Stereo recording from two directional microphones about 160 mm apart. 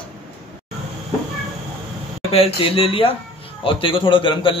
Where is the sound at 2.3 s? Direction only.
35° left (ahead or behind).